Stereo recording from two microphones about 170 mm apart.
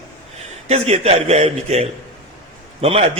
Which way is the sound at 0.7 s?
40° right (ahead or behind).